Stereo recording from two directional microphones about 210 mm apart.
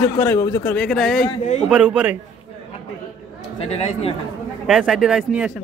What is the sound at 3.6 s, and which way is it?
Speech, 30° left (ahead or behind).